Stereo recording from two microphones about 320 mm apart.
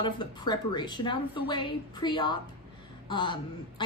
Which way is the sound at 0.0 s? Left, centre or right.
Centre.